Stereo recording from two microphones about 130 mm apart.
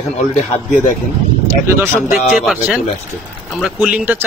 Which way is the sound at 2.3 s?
5° right (ahead or behind).